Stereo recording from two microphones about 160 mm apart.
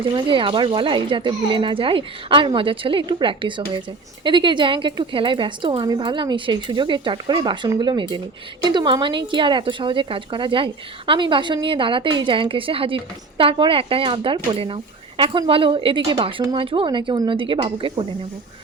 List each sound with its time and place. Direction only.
0.0 s speech: 30° right (ahead or behind)